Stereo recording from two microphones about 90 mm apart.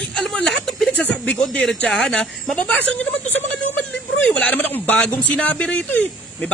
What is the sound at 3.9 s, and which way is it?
Speech, 10° left (ahead or behind).